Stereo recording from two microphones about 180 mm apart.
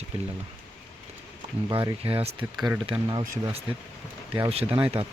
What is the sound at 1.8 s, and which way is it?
Speech, 30° right (ahead or behind).